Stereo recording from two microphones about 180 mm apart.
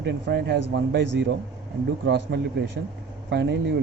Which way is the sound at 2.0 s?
65° right (ahead or behind).